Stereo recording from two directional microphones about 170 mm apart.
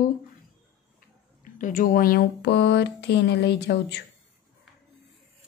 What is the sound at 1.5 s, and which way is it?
Speech, 50° left (ahead or behind).